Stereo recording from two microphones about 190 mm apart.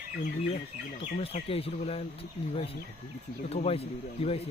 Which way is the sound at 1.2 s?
30° left (ahead or behind).